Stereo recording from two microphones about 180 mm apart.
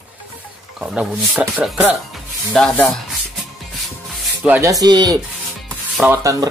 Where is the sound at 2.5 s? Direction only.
5° left (ahead or behind).